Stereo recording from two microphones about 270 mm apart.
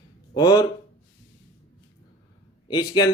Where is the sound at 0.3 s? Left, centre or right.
Centre.